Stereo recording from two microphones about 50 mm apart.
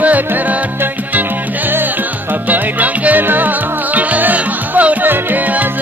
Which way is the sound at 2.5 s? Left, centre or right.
Right.